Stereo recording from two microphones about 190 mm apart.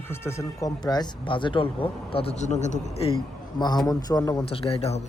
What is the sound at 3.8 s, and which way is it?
Speech, 20° left (ahead or behind).